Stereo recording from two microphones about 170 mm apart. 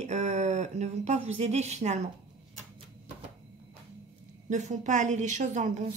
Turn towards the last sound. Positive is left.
turn(degrees=-45)  # may be behind; listen again after turning